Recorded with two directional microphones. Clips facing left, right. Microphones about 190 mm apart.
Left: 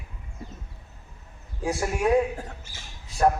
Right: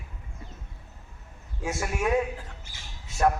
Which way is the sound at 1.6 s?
35° left (ahead or behind).